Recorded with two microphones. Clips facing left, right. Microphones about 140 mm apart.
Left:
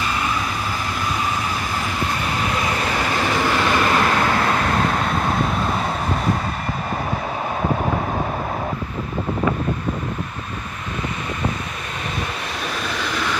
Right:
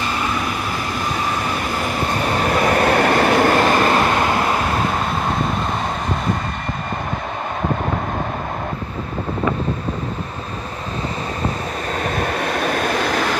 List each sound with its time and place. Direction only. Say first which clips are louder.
2.4 s vehicle: right 8 dB; 50° right (ahead or behind); by 4.6 s 20° right (ahead or behind)
12.0 s train: right 6 dB; 50° right (ahead or behind)